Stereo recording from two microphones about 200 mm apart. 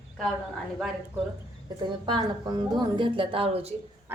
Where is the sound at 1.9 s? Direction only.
25° right (ahead or behind).